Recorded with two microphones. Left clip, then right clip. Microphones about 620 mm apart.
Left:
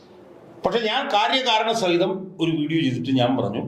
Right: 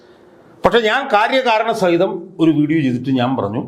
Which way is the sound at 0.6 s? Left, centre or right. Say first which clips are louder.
Right 9 dB; right.